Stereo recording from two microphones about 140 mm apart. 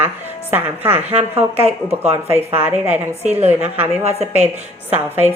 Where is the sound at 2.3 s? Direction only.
15° right (ahead or behind).